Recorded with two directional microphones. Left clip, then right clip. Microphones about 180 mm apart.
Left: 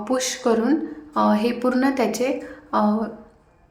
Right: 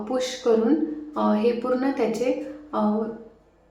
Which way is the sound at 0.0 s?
20° left (ahead or behind).